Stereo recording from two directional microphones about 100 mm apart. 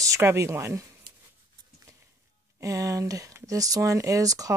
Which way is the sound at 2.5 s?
35° right (ahead or behind).